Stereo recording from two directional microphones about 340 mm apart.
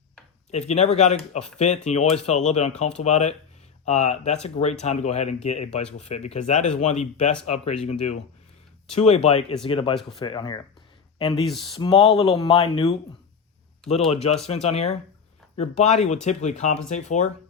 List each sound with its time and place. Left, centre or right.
0.7 s speech: centre
14.4 s speech: centre